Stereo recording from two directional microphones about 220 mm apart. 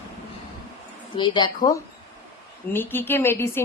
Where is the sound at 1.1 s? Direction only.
20° left (ahead or behind).